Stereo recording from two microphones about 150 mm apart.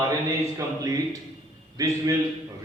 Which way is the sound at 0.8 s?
20° right (ahead or behind).